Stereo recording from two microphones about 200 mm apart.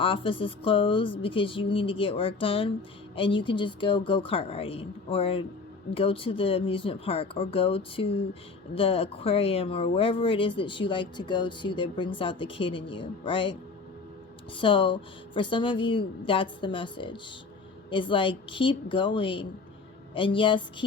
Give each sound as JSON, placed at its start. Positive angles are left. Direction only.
{"t": 0.0, "sound": "speech", "side_deg": 25}
{"t": 14.6, "sound": "speech", "side_deg": 25}